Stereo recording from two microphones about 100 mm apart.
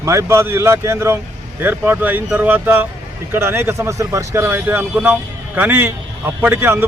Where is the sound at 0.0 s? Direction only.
30° right (ahead or behind).